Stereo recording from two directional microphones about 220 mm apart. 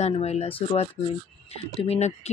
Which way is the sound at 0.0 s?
30° left (ahead or behind).